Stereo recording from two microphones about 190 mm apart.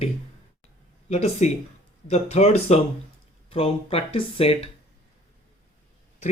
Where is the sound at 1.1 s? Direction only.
35° left (ahead or behind).